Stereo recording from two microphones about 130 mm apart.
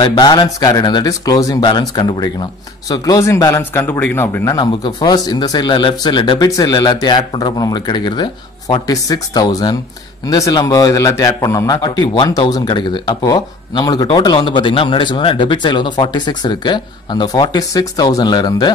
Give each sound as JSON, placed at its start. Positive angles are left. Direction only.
{"t": 0.0, "sound": "a man's voice", "side_deg": 30}
{"t": 4.6, "sound": "a man's voice", "side_deg": 35}